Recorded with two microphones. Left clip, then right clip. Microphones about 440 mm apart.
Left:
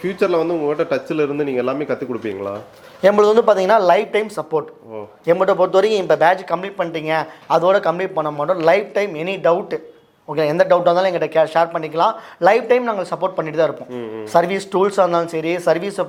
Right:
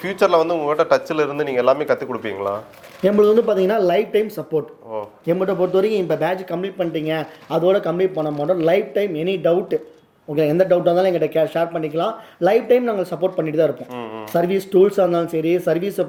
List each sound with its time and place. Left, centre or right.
0.0 s speech: right
3.0 s speech: left